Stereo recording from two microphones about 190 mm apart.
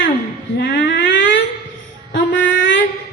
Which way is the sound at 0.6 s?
65° left (ahead or behind).